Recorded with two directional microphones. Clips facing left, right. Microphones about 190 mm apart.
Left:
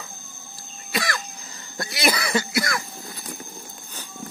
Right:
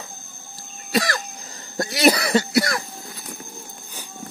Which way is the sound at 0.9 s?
40° right (ahead or behind).